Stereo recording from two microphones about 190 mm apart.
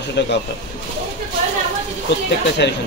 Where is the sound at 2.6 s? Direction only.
65° left (ahead or behind).